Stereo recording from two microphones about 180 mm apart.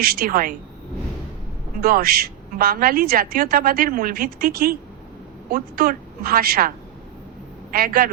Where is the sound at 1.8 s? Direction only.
55° right (ahead or behind).